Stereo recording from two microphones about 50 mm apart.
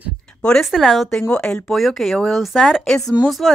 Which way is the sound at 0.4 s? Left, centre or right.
Centre.